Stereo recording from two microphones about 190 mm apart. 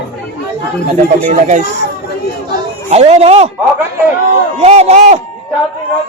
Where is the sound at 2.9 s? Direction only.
35° right (ahead or behind).